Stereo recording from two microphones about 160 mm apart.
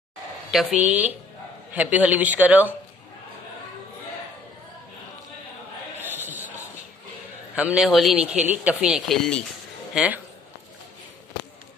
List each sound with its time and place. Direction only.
0.5 s a man's voice: 5° right (ahead or behind)
5.9 s basketball bounce: 10° right (ahead or behind)
7.5 s speech: 5° right (ahead or behind)
9.9 s a man's voice: 10° right (ahead or behind)